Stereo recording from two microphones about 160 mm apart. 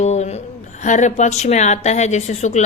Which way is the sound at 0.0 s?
45° left (ahead or behind).